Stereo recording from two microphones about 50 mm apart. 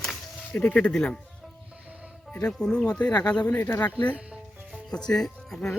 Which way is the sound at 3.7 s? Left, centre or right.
Left.